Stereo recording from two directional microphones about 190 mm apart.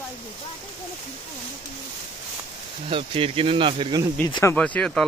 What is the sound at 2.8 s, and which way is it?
Speech, 30° right (ahead or behind).